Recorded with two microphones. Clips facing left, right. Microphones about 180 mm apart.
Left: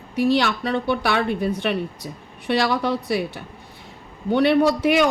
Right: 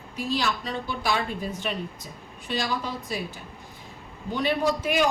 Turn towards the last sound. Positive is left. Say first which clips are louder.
# left 7 dB
turn(degrees=70)  # may be behind; listen again after turning